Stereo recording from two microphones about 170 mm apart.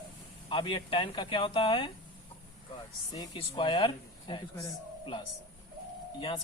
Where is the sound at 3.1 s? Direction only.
25° left (ahead or behind).